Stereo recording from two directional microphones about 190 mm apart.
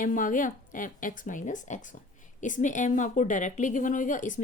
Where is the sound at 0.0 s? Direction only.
45° left (ahead or behind).